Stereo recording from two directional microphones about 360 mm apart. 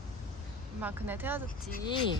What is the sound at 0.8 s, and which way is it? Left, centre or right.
Speech, centre.